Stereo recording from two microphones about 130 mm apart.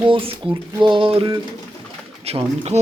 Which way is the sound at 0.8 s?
40° right (ahead or behind).